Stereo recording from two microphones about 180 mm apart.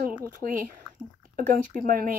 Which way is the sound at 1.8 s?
50° right (ahead or behind).